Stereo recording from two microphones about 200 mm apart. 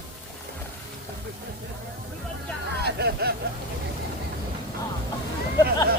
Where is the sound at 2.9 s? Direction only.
55° right (ahead or behind).